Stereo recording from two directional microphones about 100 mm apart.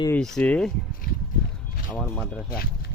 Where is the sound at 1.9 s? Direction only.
5° left (ahead or behind).